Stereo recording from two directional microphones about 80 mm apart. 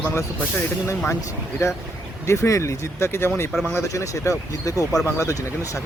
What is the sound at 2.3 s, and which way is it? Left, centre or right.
Speech, left.